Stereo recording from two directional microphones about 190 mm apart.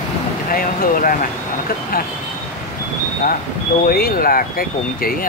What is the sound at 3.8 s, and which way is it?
Speech, 50° left (ahead or behind).